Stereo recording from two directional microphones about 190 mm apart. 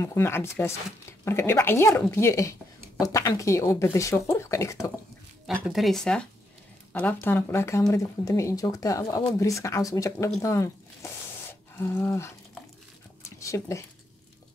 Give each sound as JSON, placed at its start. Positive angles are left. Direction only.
{"t": 0.0, "sound": "speech", "side_deg": 15}
{"t": 5.5, "sound": "speech", "side_deg": 0}
{"t": 13.2, "sound": "dog", "side_deg": 15}